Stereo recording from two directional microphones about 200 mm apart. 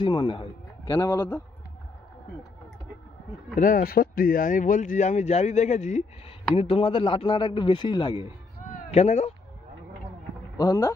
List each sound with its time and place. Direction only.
0.0 s speech: 25° left (ahead or behind)
3.5 s speech: 45° left (ahead or behind); by 8.3 s 25° left (ahead or behind)
8.9 s speech: 35° left (ahead or behind)
10.6 s speech: 20° left (ahead or behind)